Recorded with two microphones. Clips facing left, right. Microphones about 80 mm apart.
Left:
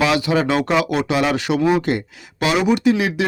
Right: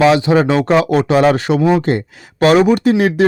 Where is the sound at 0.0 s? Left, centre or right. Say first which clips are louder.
Right 6 dB; right.